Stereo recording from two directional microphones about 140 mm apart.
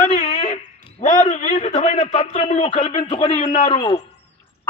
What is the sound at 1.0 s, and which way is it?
A man's voice, 55° left (ahead or behind).